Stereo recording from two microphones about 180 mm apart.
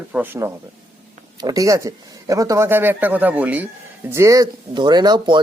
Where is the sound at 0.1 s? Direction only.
10° right (ahead or behind).